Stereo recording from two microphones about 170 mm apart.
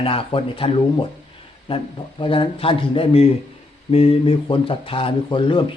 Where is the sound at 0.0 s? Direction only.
30° left (ahead or behind).